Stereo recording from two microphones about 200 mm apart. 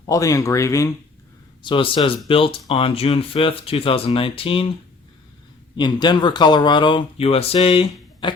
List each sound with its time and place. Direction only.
0.1 s speech: 15° left (ahead or behind)
5.7 s speech: 20° left (ahead or behind)